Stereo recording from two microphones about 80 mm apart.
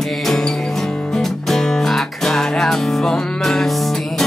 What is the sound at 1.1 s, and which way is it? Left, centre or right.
Music, centre.